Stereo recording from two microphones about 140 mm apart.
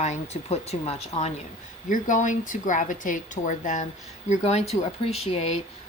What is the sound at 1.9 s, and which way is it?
A woman's voice, 65° left (ahead or behind).